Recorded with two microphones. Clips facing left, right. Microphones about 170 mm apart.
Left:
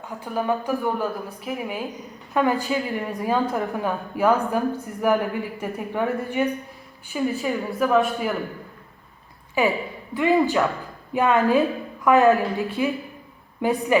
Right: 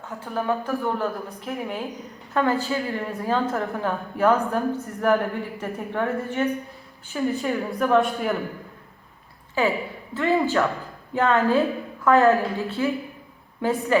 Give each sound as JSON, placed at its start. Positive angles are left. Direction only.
{"t": 0.0, "sound": "a woman's voice", "side_deg": 15}
{"t": 1.0, "sound": "a woman's voice", "side_deg": 0}
{"t": 9.6, "sound": "a woman's voice", "side_deg": 15}